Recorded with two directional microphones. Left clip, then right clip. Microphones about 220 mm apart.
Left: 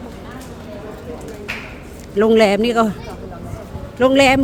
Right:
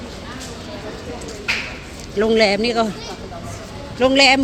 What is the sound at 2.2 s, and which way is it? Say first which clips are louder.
Speech: left 3 dB; 25° left (ahead or behind).